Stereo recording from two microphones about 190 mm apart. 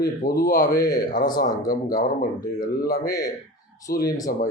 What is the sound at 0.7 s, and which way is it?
Speech, 20° left (ahead or behind).